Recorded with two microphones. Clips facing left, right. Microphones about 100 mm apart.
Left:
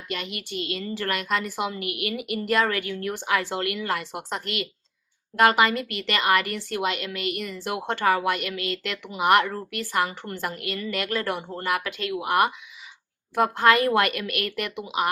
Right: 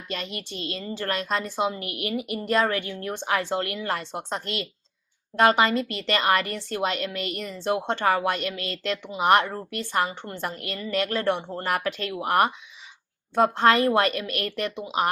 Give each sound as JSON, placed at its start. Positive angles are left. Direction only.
{"t": 0.1, "sound": "a woman's voice", "side_deg": -35}